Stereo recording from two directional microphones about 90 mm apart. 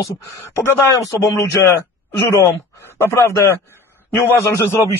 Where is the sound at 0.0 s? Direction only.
35° left (ahead or behind).